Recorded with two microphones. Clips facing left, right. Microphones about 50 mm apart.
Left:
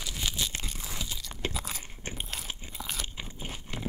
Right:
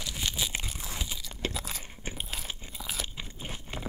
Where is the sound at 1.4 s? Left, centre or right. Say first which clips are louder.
Even; centre.